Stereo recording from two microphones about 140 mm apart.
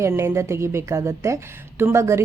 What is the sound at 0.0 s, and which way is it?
A woman's voice, 20° right (ahead or behind).